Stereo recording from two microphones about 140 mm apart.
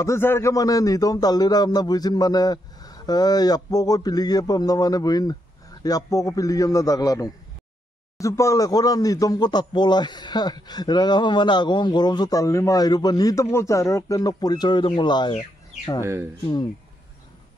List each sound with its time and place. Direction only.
0.0 s speech: 20° left (ahead or behind)
16.0 s speech: 20° right (ahead or behind)